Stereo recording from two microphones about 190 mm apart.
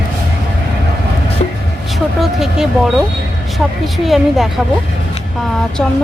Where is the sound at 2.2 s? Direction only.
Centre (ahead or behind).